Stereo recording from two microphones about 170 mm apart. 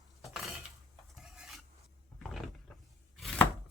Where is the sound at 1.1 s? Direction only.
Centre (ahead or behind).